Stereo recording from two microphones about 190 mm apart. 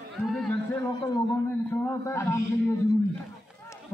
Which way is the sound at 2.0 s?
15° left (ahead or behind).